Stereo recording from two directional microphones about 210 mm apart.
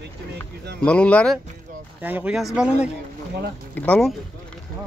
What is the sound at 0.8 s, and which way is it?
Speech, 5° left (ahead or behind).